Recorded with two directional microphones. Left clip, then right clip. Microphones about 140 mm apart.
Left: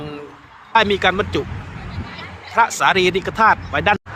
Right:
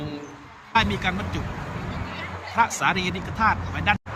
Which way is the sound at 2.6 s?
25° left (ahead or behind).